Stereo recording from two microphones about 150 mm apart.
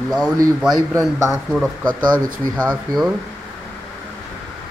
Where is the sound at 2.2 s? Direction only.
65° right (ahead or behind).